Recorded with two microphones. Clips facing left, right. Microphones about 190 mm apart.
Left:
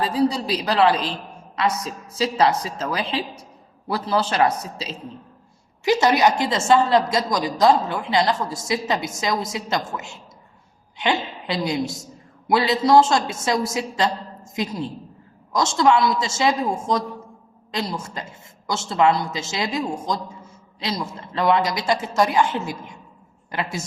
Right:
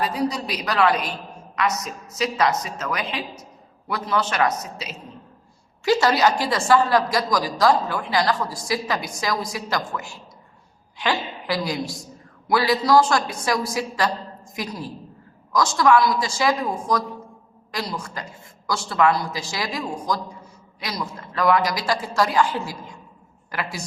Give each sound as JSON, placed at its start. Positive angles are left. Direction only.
{"t": 0.0, "sound": "a woman's voice", "side_deg": 30}
{"t": 5.8, "sound": "a woman's voice", "side_deg": 20}